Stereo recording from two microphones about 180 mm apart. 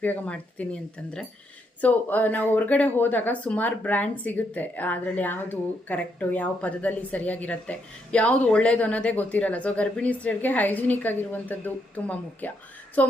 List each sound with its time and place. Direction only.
0.0 s a woman's voice: 10° left (ahead or behind)